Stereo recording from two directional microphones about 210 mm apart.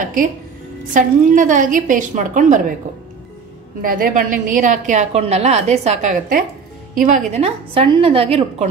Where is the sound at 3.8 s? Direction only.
40° right (ahead or behind); by 8.4 s 25° right (ahead or behind).